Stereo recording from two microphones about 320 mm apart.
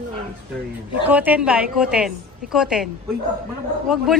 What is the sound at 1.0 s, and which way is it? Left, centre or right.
A woman's voice, centre.